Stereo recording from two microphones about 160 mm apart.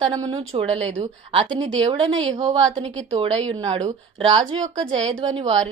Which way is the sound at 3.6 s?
35° right (ahead or behind).